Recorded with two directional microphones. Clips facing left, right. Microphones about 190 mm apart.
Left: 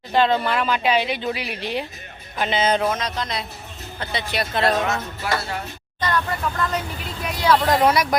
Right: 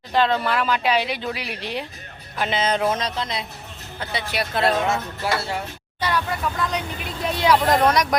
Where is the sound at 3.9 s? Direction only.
10° right (ahead or behind).